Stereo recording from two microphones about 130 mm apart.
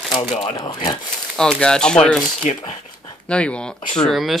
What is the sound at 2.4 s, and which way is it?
Speech, 45° left (ahead or behind).